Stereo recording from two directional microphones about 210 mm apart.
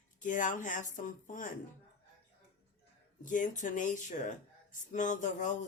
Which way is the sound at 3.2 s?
40° left (ahead or behind).